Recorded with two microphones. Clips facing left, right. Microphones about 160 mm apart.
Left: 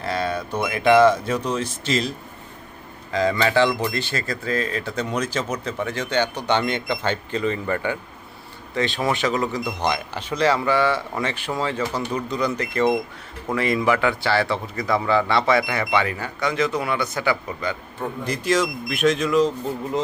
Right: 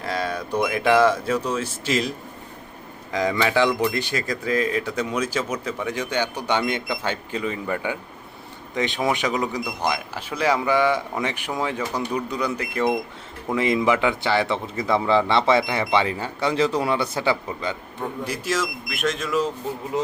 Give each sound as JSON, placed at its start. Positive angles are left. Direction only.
{"t": 0.0, "sound": "speech", "side_deg": -15}
{"t": 13.5, "sound": "a man's voice", "side_deg": -20}
{"t": 18.3, "sound": "speech", "side_deg": -5}